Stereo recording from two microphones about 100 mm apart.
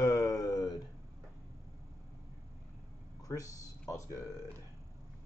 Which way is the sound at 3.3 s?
35° left (ahead or behind).